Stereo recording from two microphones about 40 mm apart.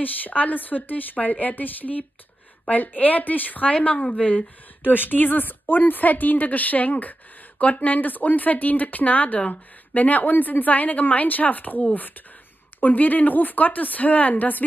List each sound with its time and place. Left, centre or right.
0.0 s a woman's voice: left
4.8 s a woman's voice: left
12.8 s a woman's voice: left